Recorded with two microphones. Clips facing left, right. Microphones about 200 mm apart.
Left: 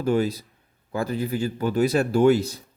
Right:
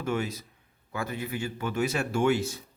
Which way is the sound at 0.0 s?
35° left (ahead or behind).